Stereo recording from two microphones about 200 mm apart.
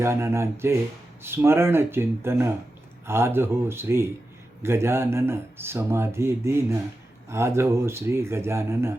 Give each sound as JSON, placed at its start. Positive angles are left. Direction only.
{"t": 0.0, "sound": "speech", "side_deg": -15}